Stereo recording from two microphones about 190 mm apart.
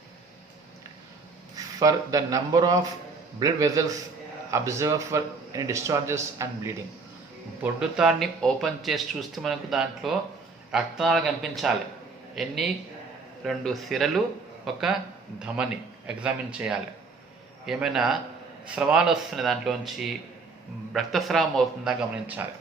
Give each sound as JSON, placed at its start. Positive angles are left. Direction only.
{"t": 1.5, "sound": "a man's voice", "side_deg": -20}
{"t": 7.6, "sound": "speech", "side_deg": -5}
{"t": 20.9, "sound": "speech", "side_deg": 0}